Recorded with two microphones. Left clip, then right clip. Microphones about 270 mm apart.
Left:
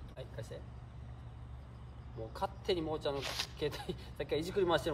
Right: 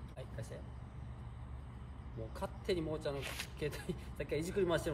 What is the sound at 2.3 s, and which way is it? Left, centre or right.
A man's voice, centre.